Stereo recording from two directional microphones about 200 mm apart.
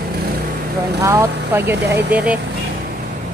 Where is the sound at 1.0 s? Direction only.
15° right (ahead or behind).